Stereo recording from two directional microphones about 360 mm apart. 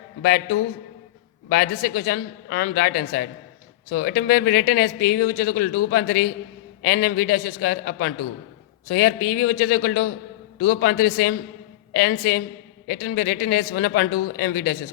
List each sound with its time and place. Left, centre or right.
1.5 s speech: left